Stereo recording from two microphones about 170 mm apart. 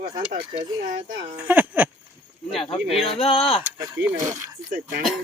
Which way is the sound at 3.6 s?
20° right (ahead or behind).